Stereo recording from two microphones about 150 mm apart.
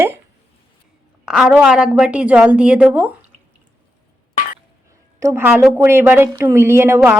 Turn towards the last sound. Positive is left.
turn(degrees=-15)  # may be behind; listen again after turning